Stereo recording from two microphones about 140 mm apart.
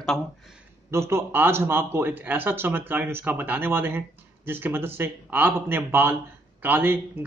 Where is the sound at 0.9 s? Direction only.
20° right (ahead or behind).